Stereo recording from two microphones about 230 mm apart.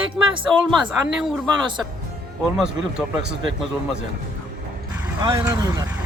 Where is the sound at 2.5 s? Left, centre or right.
Centre.